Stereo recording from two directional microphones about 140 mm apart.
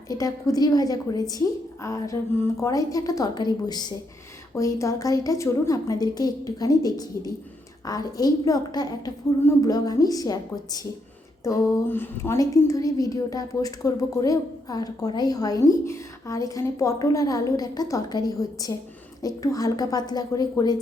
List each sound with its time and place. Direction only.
0.1 s a woman's voice: 25° left (ahead or behind)